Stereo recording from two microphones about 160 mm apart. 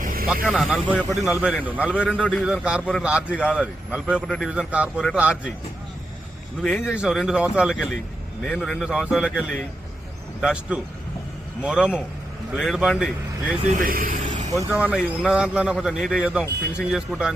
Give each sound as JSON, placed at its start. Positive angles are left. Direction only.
{"t": 0.0, "sound": "vehicle", "side_deg": -65}
{"t": 0.4, "sound": "a man's voice", "side_deg": 0}
{"t": 6.6, "sound": "a man's voice", "side_deg": 5}
{"t": 13.7, "sound": "speech", "side_deg": -60}
{"t": 14.7, "sound": "a man's voice", "side_deg": -5}